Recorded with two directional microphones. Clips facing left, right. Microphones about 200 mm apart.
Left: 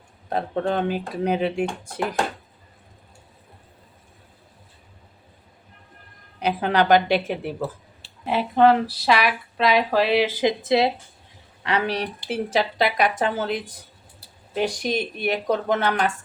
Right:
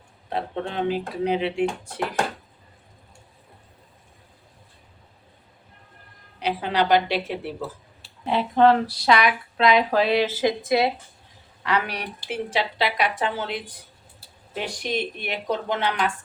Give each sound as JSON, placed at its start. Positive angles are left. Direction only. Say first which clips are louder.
{"t": 0.3, "sound": "speech", "louder": "left 5 dB", "side_deg": 45}
{"t": 6.4, "sound": "speech", "louder": "left 3 dB", "side_deg": 50}
{"t": 8.2, "sound": "a woman's voice", "louder": "left 1 dB", "side_deg": 5}
{"t": 12.5, "sound": "speech", "louder": "left 3 dB", "side_deg": 45}